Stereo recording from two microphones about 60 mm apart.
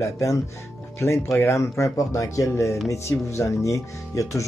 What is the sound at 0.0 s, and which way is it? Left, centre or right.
Speech, left.